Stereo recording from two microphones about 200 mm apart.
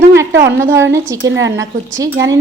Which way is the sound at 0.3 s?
60° right (ahead or behind).